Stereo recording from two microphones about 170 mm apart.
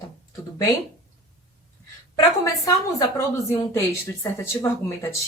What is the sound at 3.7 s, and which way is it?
Speech, 15° left (ahead or behind).